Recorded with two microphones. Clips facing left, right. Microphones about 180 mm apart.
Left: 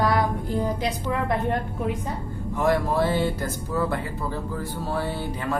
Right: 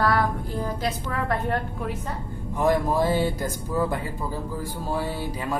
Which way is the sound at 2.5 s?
15° right (ahead or behind).